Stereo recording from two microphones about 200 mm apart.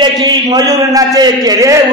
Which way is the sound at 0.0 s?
20° right (ahead or behind).